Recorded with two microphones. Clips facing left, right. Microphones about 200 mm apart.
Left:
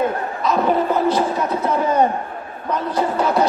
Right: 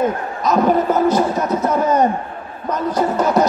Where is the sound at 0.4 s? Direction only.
40° right (ahead or behind).